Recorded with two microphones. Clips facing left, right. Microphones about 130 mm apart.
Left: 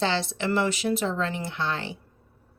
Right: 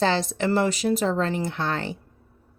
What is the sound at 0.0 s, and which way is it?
Speech, 45° right (ahead or behind).